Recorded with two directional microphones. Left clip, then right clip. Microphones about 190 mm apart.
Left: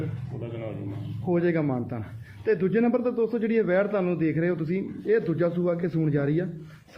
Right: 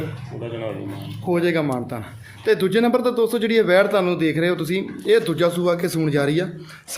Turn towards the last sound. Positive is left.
turn(degrees=-10)  # may be behind; listen again after turning